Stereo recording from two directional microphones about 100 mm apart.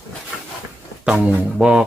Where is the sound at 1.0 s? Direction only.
10° right (ahead or behind).